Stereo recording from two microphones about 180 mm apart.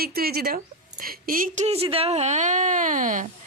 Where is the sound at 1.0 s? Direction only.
50° right (ahead or behind).